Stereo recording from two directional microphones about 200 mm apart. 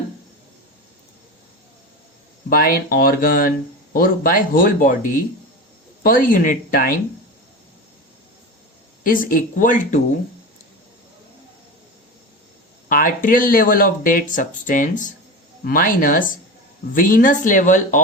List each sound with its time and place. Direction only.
2.5 s speech: 45° left (ahead or behind)
6.0 s speech: 45° left (ahead or behind)
9.0 s a woman's voice: 45° left (ahead or behind)
12.9 s a woman's voice: 45° left (ahead or behind)